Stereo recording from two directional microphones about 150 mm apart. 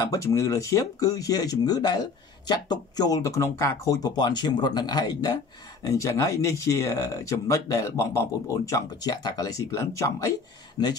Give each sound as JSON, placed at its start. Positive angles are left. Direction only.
{"t": 0.0, "sound": "speech", "side_deg": 20}